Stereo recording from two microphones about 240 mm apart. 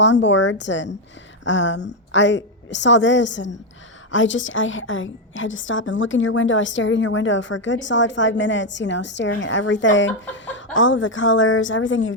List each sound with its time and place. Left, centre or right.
0.0 s a woman's voice: left